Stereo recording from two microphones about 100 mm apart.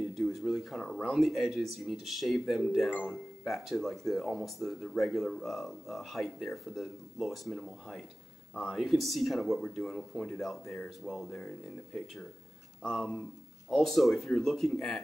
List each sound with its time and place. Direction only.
0.1 s speech: centre (ahead or behind)